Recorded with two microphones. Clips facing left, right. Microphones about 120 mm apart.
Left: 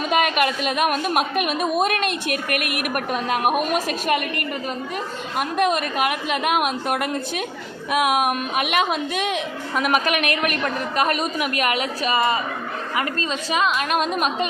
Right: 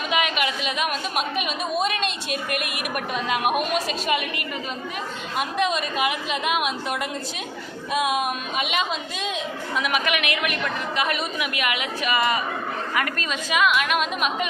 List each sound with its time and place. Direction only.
0.1 s a woman's voice: 45° left (ahead or behind)
5.4 s a woman's voice: 50° left (ahead or behind)
9.8 s a woman's voice: 40° left (ahead or behind)